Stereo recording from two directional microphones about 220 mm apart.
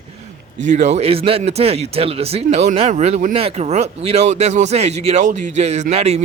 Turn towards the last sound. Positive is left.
turn(degrees=-30)  # may be behind; listen again after turning